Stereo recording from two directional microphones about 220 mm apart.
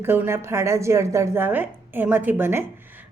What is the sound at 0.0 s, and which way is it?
A woman's voice, 10° right (ahead or behind).